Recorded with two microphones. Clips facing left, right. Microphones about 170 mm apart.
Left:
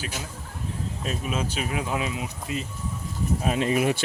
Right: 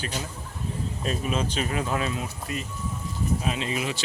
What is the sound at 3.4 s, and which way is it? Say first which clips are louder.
Speech: left 6 dB; 50° left (ahead or behind).